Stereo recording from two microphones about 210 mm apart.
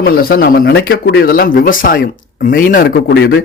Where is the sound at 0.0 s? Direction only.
45° left (ahead or behind).